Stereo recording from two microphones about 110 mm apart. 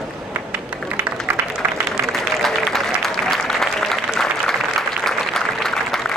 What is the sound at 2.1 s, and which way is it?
Applause, centre (ahead or behind).